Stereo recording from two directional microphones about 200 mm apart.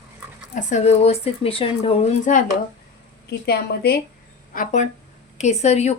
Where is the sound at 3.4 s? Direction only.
50° left (ahead or behind).